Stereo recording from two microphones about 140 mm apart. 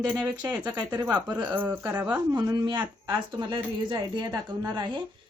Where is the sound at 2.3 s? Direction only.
25° right (ahead or behind).